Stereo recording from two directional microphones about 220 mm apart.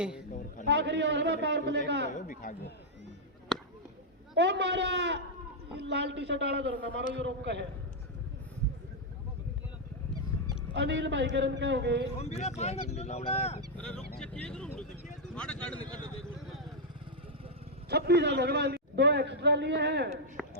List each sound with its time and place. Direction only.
0.6 s a man's voice: 50° right (ahead or behind)
2.0 s speech: 35° left (ahead or behind)
4.4 s a man's voice: 50° right (ahead or behind)
10.8 s a man's voice: 55° right (ahead or behind)
12.2 s speech: 30° left (ahead or behind)
13.7 s speech: 5° left (ahead or behind)
17.8 s a man's voice: 50° right (ahead or behind)
20.4 s a sound: centre (ahead or behind)